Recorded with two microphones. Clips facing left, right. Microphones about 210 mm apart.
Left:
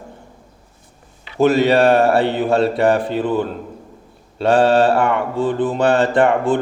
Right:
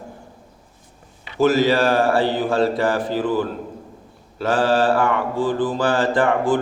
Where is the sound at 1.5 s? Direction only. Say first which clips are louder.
Left 4 dB; 65° left (ahead or behind).